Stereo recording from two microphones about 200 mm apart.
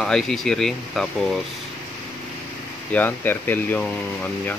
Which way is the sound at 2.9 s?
10° left (ahead or behind).